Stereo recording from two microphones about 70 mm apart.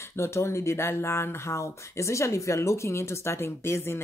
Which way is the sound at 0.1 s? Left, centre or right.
Left.